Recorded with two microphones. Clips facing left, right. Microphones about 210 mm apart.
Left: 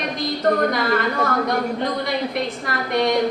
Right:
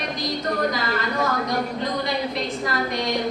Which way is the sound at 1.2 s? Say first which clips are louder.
Left 3 dB; 55° left (ahead or behind).